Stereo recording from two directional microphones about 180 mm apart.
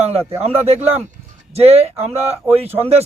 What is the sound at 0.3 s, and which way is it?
A man's voice, 35° right (ahead or behind).